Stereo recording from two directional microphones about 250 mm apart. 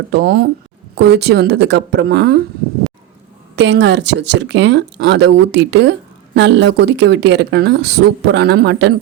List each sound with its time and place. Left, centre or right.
0.1 s speech: right
3.5 s speech: right